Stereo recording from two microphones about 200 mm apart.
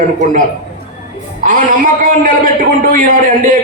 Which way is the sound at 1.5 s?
45° right (ahead or behind).